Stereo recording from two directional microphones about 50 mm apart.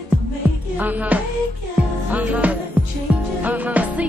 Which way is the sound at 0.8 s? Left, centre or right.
Right.